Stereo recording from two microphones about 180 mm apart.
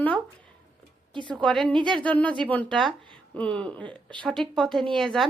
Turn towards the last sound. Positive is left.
turn(degrees=0)  # may be behind; listen again after turning